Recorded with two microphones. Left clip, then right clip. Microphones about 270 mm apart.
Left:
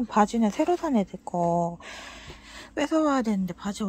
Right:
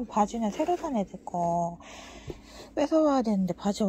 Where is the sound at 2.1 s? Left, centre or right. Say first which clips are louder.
Left 1 dB; centre.